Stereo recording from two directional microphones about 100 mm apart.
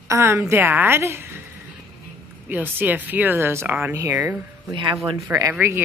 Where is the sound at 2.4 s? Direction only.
20° right (ahead or behind).